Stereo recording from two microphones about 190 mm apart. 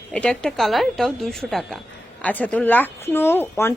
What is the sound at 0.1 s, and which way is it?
A woman's voice, 5° left (ahead or behind).